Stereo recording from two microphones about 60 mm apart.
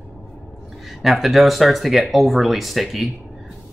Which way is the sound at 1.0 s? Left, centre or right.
Centre.